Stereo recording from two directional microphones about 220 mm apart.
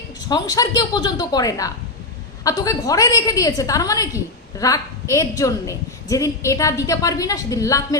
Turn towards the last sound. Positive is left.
turn(degrees=15)  # may be behind; listen again after turning